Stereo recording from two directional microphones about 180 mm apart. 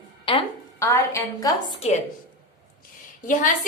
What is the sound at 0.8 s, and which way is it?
Speech, 20° left (ahead or behind).